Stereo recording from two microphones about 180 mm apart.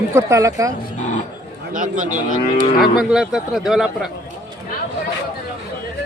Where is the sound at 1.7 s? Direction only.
45° right (ahead or behind).